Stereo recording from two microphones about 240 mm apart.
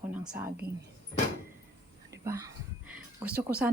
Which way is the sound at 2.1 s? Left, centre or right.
Centre.